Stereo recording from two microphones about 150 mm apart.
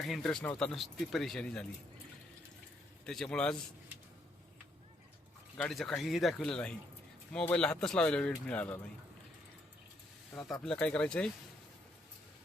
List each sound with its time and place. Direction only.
0.0 s speech: centre (ahead or behind)
3.1 s speech: 5° left (ahead or behind)
5.5 s speech: 5° left (ahead or behind)
10.3 s speech: 5° left (ahead or behind)